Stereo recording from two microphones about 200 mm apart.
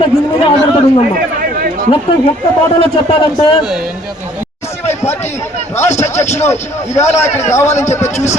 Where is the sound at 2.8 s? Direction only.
25° left (ahead or behind).